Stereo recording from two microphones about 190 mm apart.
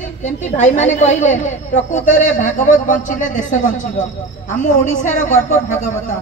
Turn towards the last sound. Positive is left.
turn(degrees=40)  # may be behind; listen again after turning